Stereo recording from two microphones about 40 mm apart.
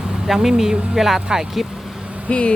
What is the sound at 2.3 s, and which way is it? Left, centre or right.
Speech, left.